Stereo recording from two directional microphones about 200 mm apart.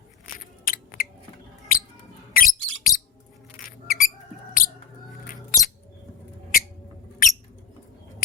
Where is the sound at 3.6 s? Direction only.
45° left (ahead or behind).